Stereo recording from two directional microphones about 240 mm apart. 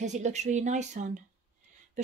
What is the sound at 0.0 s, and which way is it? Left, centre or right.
Speech, right.